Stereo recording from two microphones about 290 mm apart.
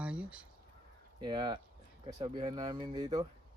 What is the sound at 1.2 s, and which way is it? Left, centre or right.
Speech, centre.